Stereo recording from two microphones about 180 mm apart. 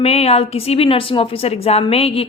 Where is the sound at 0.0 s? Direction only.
35° left (ahead or behind).